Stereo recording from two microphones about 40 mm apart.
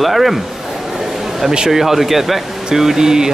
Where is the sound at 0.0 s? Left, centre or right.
Centre.